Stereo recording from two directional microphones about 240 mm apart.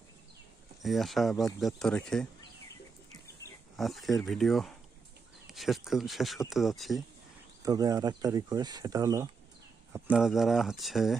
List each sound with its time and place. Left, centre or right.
0.8 s speech: centre
3.8 s speech: centre
7.6 s speech: centre
9.9 s speech: centre